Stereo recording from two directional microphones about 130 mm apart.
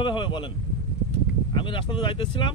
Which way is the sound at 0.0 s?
40° left (ahead or behind).